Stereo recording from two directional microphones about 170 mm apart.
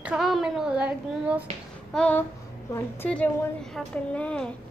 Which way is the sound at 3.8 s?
5° left (ahead or behind).